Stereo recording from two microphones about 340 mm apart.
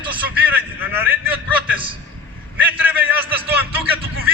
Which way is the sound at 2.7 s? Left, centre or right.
Centre.